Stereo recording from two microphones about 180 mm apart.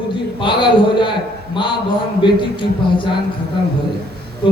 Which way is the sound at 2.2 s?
25° left (ahead or behind).